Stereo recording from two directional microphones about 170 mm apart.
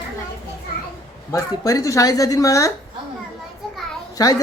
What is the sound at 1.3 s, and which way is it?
Speech, 20° left (ahead or behind).